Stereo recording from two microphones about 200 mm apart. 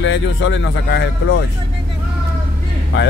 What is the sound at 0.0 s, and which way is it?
Speech, 65° left (ahead or behind).